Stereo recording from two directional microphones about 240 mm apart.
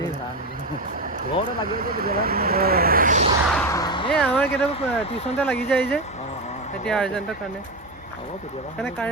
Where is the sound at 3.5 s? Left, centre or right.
Centre.